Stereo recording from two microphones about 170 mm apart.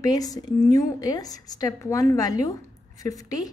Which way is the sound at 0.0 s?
20° left (ahead or behind).